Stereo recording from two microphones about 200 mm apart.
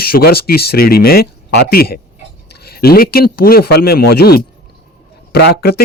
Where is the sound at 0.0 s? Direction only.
50° left (ahead or behind).